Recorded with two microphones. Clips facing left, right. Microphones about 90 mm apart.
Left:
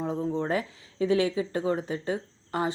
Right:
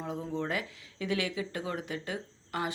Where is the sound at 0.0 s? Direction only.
30° left (ahead or behind).